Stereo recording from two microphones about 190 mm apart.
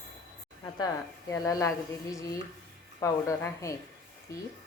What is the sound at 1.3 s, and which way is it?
Speech, 15° left (ahead or behind).